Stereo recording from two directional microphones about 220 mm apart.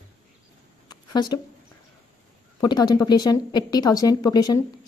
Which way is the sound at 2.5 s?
20° left (ahead or behind).